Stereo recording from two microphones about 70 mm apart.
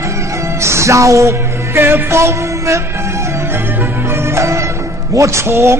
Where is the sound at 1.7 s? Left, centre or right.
Right.